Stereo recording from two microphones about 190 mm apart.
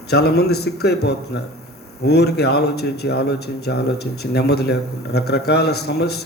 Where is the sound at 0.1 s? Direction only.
60° left (ahead or behind).